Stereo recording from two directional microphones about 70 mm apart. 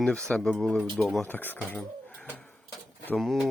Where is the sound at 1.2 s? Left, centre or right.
Left.